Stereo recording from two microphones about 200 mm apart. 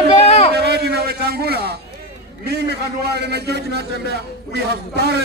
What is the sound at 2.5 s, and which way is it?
A man's voice, 55° right (ahead or behind).